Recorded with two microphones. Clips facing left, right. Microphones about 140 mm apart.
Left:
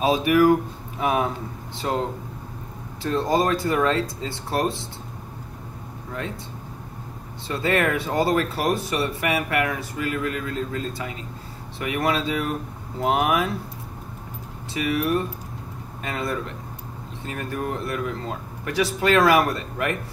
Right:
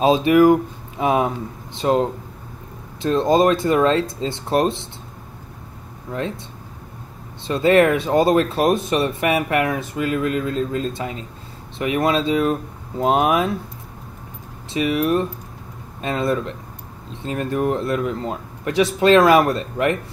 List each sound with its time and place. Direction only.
0.0 s speech: 25° right (ahead or behind)
7.4 s speech: 20° right (ahead or behind)
14.7 s speech: 20° right (ahead or behind)